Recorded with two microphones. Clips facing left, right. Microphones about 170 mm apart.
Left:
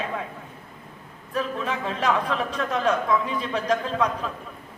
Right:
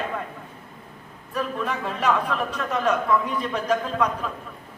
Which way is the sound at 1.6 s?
5° right (ahead or behind).